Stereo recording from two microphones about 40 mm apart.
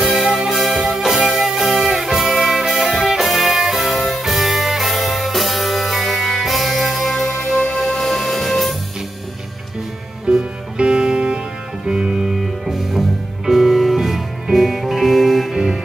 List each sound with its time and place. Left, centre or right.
0.0 s music: centre
10.2 s music: right
12.3 s music: centre